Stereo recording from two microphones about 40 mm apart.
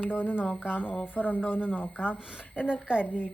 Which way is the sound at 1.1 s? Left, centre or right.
Left.